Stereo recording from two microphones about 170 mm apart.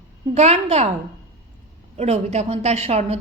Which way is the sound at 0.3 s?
40° right (ahead or behind).